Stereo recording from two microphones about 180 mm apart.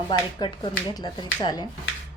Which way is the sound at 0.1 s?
25° left (ahead or behind).